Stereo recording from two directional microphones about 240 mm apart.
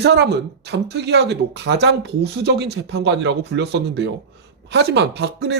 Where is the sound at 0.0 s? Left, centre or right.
Right.